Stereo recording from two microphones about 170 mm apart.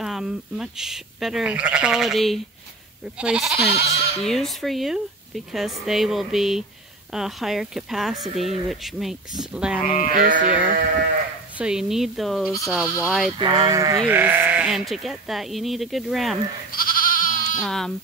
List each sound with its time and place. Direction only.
0.0 s speech: 5° right (ahead or behind)
10.0 s sheep: 50° right (ahead or behind)
11.5 s speech: 5° right (ahead or behind)
13.4 s speech: 25° right (ahead or behind); by 16.3 s centre (ahead or behind)
16.7 s goat: 55° left (ahead or behind)
17.6 s speech: centre (ahead or behind)